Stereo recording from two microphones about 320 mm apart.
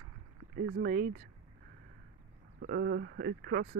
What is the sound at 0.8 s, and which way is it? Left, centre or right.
Speech, right.